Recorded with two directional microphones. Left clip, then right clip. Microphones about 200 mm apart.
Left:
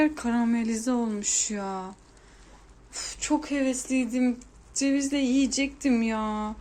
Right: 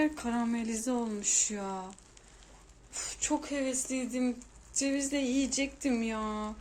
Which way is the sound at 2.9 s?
Centre (ahead or behind).